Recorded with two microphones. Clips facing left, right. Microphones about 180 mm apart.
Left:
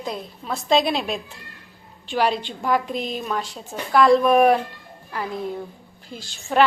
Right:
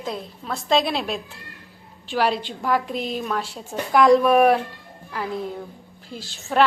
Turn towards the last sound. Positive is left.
turn(degrees=0)  # may be behind; listen again after turning